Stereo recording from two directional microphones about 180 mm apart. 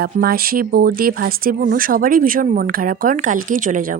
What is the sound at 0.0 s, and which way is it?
A woman's voice, 55° right (ahead or behind).